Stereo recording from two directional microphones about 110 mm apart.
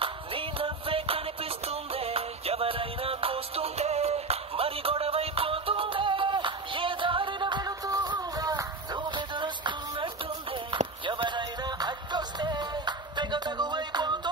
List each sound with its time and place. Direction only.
0.0 s music: 55° right (ahead or behind)